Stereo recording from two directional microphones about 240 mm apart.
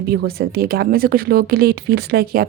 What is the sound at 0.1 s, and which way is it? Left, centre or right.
Speech, right.